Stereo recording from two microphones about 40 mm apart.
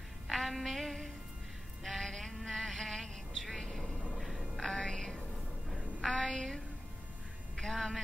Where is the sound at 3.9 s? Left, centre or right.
Left.